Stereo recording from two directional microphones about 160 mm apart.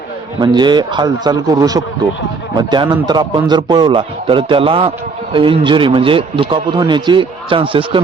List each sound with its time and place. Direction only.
0.3 s a man's voice: 25° right (ahead or behind)